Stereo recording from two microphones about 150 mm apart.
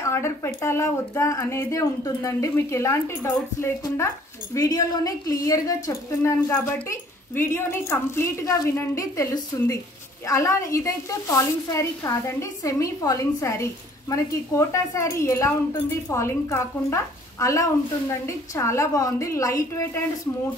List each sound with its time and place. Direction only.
0.0 s speech: 15° left (ahead or behind)